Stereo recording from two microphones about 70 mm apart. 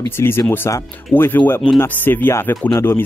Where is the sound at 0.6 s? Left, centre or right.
Left.